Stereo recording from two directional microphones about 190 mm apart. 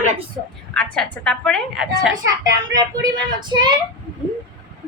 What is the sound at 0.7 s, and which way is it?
A woman's voice, 5° left (ahead or behind).